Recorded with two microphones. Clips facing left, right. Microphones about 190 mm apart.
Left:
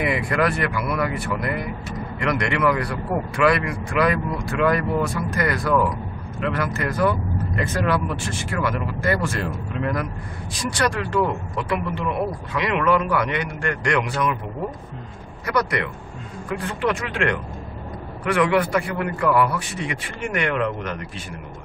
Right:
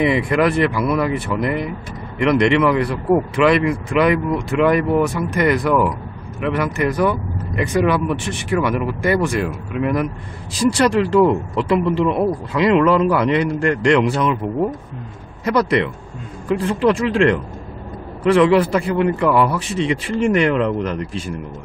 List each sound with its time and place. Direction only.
0.0 s a man's voice: 20° right (ahead or behind)
10.5 s a man's voice: 25° right (ahead or behind)
15.4 s a man's voice: 25° right (ahead or behind)